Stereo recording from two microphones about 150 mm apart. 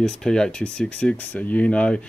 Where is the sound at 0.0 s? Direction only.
5° left (ahead or behind).